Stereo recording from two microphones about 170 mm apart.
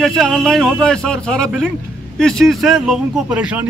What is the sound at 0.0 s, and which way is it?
A man's voice, centre (ahead or behind).